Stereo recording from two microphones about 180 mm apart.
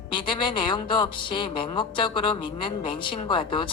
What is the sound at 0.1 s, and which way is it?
A woman's voice, 25° left (ahead or behind).